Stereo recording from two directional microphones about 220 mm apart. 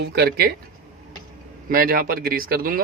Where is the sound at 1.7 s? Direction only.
40° right (ahead or behind).